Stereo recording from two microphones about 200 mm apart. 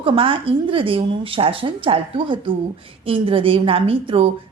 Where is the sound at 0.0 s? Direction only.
25° right (ahead or behind).